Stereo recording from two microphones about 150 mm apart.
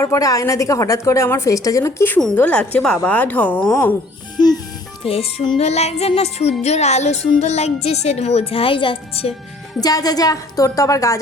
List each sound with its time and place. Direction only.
0.0 s a woman's voice: 20° left (ahead or behind)
4.4 s music: 25° left (ahead or behind)
5.0 s speech: 40° left (ahead or behind)
9.8 s a woman's voice: 25° left (ahead or behind)